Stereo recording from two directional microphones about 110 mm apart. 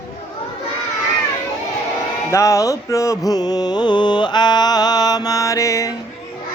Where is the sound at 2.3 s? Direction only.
30° left (ahead or behind).